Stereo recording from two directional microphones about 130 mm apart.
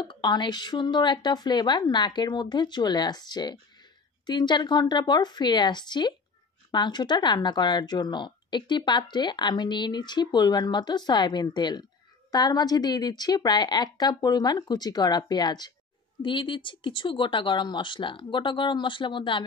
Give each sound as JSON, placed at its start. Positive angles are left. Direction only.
{"t": 0.0, "sound": "speech", "side_deg": 35}